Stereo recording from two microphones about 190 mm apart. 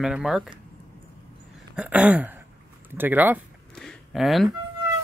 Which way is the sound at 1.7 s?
5° right (ahead or behind).